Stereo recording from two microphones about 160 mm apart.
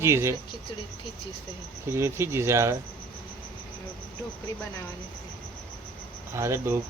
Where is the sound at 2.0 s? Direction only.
15° right (ahead or behind).